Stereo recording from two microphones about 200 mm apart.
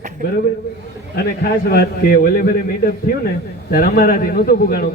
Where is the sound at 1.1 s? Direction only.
50° left (ahead or behind).